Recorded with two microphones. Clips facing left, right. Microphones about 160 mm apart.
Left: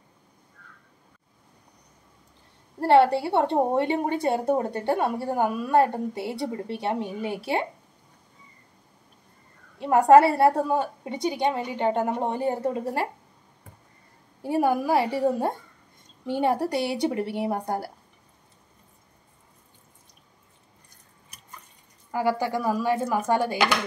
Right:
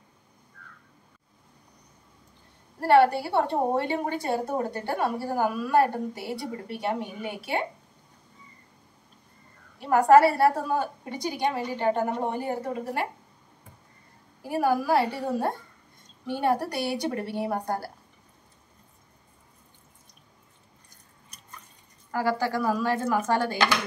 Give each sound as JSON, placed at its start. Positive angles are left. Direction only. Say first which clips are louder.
{"t": 2.9, "sound": "a woman's voice", "louder": "left 1 dB", "side_deg": 25}
{"t": 9.8, "sound": "a woman's voice", "louder": "left 2 dB", "side_deg": 25}
{"t": 14.4, "sound": "a woman's voice", "louder": "left 2 dB", "side_deg": 25}
{"t": 22.1, "sound": "speech", "louder": "left 1 dB", "side_deg": 15}